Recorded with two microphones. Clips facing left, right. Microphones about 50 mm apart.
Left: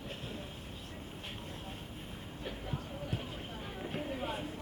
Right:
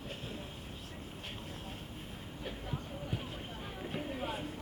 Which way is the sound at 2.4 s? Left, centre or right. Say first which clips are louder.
Even; centre.